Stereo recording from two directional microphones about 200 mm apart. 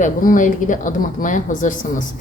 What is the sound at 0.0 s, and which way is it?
A woman's voice, 40° left (ahead or behind).